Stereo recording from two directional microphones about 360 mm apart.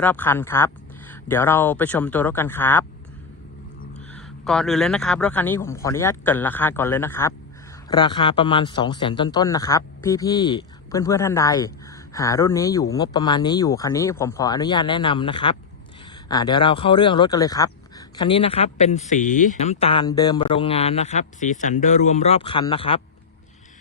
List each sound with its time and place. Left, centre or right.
0.0 s speech: centre
4.1 s a man's voice: centre